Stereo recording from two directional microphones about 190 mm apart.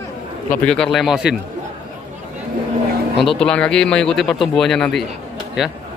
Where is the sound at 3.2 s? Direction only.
Centre (ahead or behind).